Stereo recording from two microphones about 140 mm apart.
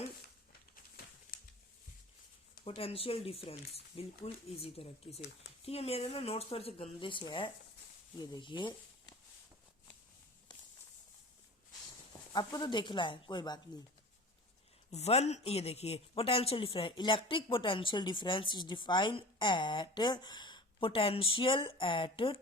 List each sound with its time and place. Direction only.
2.6 s speech: 45° left (ahead or behind)
12.3 s speech: 30° left (ahead or behind)
14.8 s speech: 50° left (ahead or behind)